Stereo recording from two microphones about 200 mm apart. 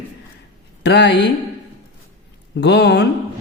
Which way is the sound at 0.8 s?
60° left (ahead or behind).